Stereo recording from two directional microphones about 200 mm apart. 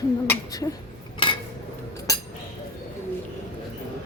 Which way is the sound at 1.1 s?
25° left (ahead or behind).